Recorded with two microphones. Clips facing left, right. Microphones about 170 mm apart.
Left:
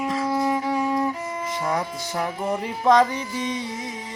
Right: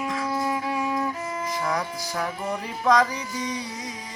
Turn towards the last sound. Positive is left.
turn(degrees=25)  # may be behind; listen again after turning